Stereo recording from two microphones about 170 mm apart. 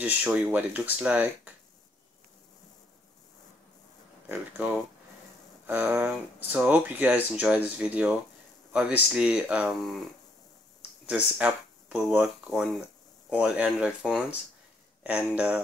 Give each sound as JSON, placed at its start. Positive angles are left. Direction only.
{"t": 0.0, "sound": "speech", "side_deg": -10}
{"t": 4.3, "sound": "speech", "side_deg": -10}